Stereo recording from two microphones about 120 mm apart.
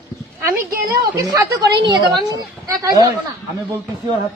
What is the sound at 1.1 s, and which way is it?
A woman's voice, 25° right (ahead or behind).